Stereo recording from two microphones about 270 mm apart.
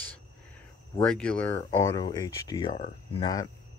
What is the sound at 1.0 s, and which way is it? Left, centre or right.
Speech, centre.